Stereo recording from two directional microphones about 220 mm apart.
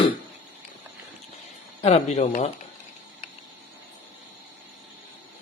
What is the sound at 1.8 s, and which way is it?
Speech, 30° left (ahead or behind).